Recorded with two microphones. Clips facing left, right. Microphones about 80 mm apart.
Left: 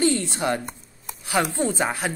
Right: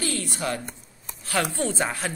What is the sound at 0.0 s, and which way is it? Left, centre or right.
Speech, left.